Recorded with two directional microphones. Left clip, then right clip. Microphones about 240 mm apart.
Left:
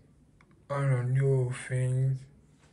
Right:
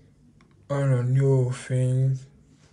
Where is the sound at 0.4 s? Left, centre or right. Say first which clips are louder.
Right 5 dB; centre.